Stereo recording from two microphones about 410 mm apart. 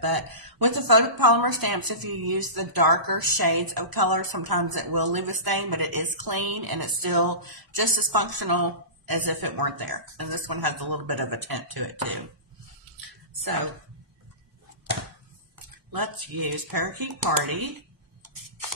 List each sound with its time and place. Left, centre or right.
0.0 s a woman's voice: right
15.9 s a woman's voice: right